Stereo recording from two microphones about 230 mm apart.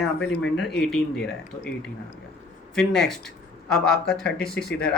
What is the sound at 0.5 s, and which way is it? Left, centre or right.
Speech, centre.